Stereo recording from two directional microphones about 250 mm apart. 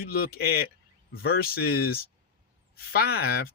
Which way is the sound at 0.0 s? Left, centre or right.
Left.